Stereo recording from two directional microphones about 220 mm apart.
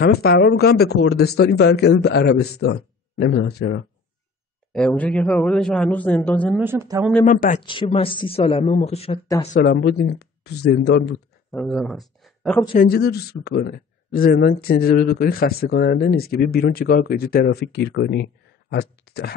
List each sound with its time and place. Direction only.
0.0 s speech: 45° left (ahead or behind)
4.7 s a man's voice: 5° left (ahead or behind)
6.6 s speech: 10° right (ahead or behind)
7.2 s speech: 35° left (ahead or behind)
7.6 s speech: 25° left (ahead or behind)
9.6 s speech: 45° left (ahead or behind)
11.5 s speech: centre (ahead or behind)
12.7 s speech: 45° left (ahead or behind)